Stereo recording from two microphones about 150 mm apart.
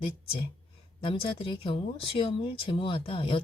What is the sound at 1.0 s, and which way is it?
Speech, 35° left (ahead or behind).